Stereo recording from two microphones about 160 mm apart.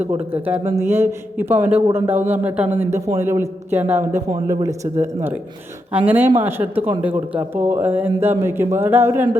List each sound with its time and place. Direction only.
0.0 s a man's voice: 10° right (ahead or behind)